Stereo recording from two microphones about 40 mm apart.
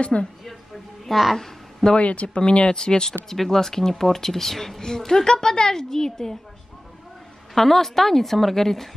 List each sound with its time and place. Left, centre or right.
0.0 s a woman's voice: left
1.0 s a child's voice: centre
1.4 s a sound: centre
2.0 s a woman's voice: left; by 6.3 s centre
7.5 s a woman's voice: centre